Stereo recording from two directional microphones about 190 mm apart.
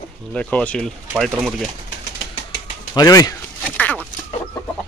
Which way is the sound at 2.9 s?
20° left (ahead or behind).